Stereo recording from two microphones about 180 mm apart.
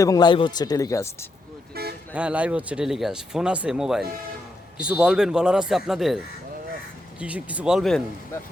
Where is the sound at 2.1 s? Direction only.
5° right (ahead or behind).